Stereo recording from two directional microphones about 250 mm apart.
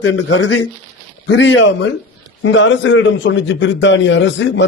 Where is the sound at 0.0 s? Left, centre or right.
Left.